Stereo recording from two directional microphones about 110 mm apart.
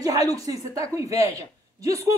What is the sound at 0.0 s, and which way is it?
A woman's voice, 30° right (ahead or behind).